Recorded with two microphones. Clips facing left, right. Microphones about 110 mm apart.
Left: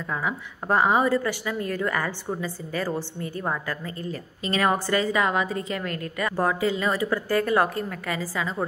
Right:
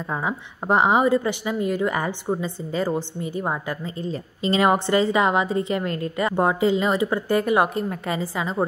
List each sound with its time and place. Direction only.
0.1 s a woman's voice: 25° right (ahead or behind)